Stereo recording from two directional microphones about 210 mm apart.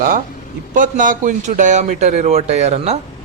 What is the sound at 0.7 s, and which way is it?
A man's voice, 40° right (ahead or behind).